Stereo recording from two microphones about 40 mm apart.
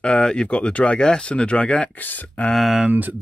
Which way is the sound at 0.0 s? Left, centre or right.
Left.